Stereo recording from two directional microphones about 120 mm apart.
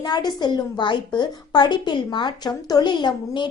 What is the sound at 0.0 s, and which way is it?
A woman's voice, 35° left (ahead or behind).